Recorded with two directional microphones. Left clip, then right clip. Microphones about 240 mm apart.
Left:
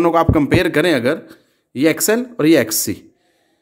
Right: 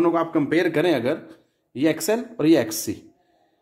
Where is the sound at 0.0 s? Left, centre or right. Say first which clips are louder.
Left 7 dB; left.